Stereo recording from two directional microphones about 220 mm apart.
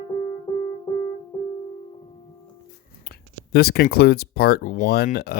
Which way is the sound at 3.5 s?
45° left (ahead or behind).